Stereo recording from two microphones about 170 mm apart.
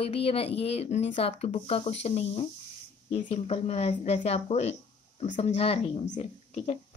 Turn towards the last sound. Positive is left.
turn(degrees=35)  # may be behind; listen again after turning